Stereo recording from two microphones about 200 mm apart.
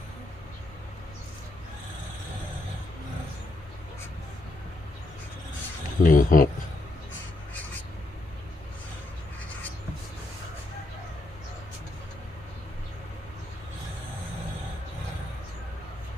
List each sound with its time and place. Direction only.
6.0 s speech: 40° left (ahead or behind)